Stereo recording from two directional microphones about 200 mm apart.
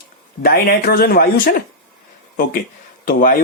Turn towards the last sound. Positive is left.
turn(degrees=45)  # may be behind; listen again after turning